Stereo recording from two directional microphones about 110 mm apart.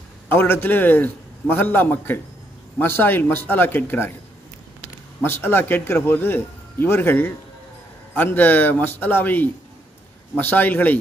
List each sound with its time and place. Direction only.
0.3 s a man's voice: 20° left (ahead or behind)
5.2 s a man's voice: 20° left (ahead or behind)